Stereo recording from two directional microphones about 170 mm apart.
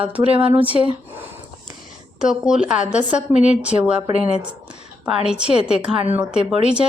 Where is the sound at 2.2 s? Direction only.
5° right (ahead or behind).